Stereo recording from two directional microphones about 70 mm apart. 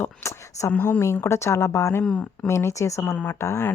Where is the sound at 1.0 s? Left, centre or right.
Left.